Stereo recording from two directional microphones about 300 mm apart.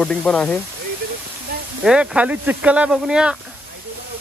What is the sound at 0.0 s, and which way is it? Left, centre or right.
Speech, centre.